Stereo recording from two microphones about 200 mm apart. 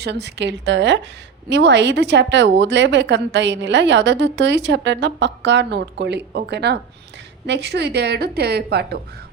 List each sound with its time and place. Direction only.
0.0 s a woman's voice: 55° right (ahead or behind)